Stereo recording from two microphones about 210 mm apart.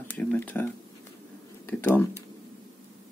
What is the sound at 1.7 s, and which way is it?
Speech, 10° left (ahead or behind).